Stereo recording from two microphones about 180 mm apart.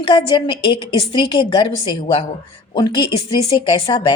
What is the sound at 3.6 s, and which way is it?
Speech, 25° left (ahead or behind).